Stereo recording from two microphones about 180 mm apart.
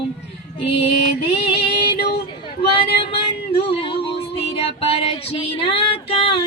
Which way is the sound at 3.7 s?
30° left (ahead or behind).